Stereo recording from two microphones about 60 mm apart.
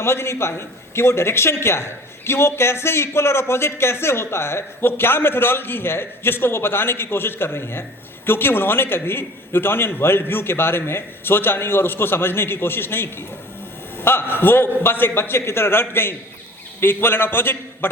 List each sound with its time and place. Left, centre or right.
0.0 s a man's voice: left